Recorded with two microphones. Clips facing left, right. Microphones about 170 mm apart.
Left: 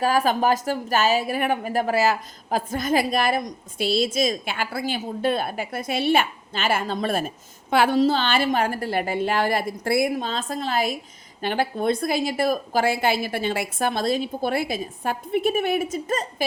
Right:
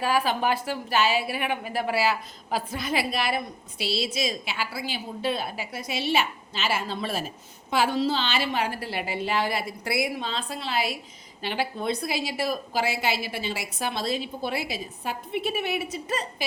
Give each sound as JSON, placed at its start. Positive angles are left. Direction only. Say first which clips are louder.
{"t": 0.0, "sound": "a woman's voice", "louder": "left 4 dB", "side_deg": 45}